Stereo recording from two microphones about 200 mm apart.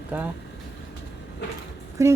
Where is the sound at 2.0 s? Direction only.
15° right (ahead or behind).